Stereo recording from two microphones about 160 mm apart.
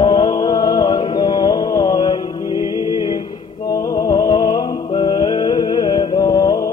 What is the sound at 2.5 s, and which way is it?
Music, 20° right (ahead or behind).